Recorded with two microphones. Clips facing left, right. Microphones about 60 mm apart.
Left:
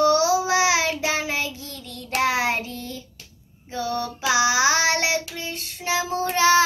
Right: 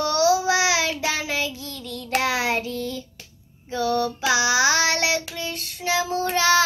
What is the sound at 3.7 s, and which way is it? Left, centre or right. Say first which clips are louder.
Female singing: right 4 dB; left.